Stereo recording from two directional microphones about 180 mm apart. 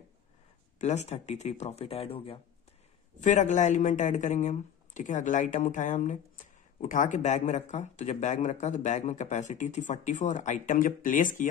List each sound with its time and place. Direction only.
0.7 s speech: 40° left (ahead or behind)
3.3 s speech: 40° left (ahead or behind)